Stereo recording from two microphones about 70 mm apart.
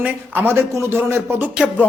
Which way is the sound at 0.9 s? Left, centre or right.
Right.